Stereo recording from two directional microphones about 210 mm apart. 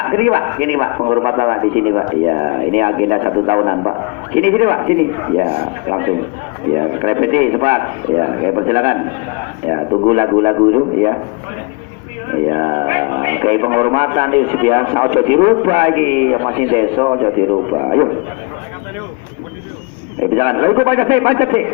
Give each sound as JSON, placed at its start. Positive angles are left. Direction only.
{"t": 0.1, "sound": "a man's voice", "side_deg": -35}
{"t": 12.3, "sound": "a man's voice", "side_deg": -25}
{"t": 20.3, "sound": "a man's voice", "side_deg": -25}